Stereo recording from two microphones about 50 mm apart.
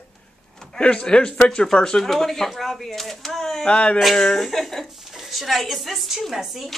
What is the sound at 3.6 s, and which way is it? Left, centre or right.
Speech, centre.